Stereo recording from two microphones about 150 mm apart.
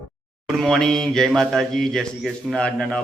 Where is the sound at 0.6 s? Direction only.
5° left (ahead or behind).